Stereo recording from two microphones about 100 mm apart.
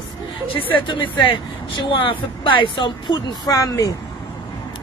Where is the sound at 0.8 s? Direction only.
50° left (ahead or behind).